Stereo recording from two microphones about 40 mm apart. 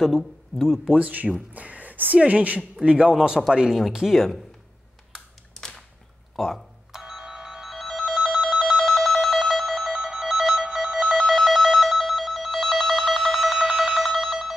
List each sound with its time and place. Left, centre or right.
0.0 s speech: centre
0.9 s speech: right
1.5 s a sound: right
2.2 s a man's voice: right
3.2 s a man's voice: centre
4.1 s speech: centre
6.3 s speech: centre
6.9 s ringtone: centre